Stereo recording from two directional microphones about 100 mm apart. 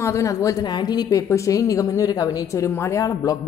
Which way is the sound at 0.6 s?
45° left (ahead or behind).